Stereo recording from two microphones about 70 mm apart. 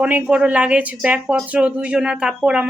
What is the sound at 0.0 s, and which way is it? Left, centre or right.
A woman's voice, centre.